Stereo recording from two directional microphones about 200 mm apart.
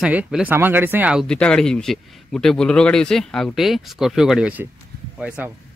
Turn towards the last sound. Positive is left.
turn(degrees=-5)  # may be behind; listen again after turning